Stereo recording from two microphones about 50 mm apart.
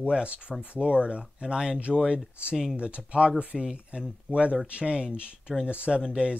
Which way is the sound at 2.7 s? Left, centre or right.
Right.